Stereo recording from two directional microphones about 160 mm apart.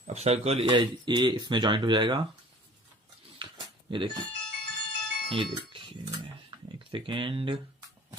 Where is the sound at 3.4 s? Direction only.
30° right (ahead or behind).